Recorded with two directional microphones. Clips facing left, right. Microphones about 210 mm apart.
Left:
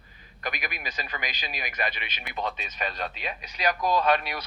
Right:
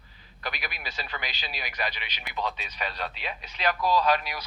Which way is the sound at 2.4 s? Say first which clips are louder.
Left 2 dB; 50° left (ahead or behind).